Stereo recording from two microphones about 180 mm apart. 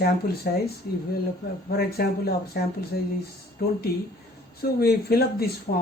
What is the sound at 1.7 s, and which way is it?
Speech, 60° left (ahead or behind).